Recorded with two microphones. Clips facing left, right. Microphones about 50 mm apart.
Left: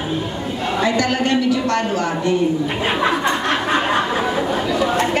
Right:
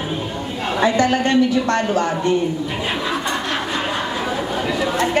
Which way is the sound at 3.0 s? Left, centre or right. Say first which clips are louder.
Left 4 dB; left.